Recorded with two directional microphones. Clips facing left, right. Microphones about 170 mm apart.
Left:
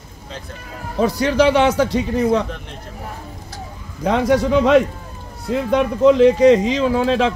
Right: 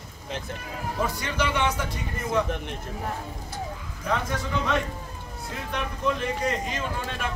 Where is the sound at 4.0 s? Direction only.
85° left.